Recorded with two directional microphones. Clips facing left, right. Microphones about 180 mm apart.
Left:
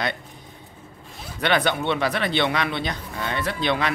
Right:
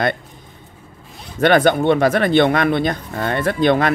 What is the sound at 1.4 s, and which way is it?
Speech, 45° right (ahead or behind).